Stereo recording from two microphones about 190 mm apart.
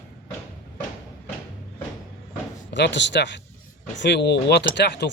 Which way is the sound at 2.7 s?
70° left (ahead or behind).